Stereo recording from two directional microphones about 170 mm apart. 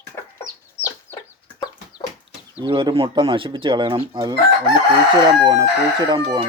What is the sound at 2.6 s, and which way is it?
Speech, 25° right (ahead or behind).